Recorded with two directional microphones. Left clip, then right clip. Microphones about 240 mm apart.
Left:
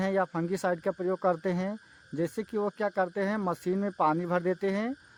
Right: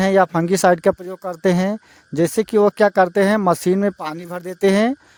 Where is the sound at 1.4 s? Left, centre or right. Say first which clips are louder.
Right 14 dB; right.